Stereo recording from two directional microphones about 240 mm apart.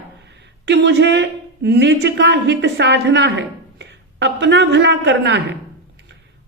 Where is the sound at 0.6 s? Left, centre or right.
Right.